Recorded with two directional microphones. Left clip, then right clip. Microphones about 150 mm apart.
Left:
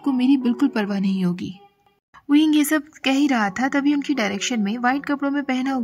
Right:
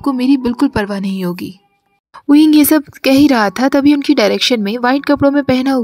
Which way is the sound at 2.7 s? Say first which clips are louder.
Right 9 dB; 25° right (ahead or behind).